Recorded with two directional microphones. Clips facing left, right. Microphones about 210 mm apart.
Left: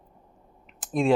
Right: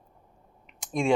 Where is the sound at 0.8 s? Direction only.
5° left (ahead or behind).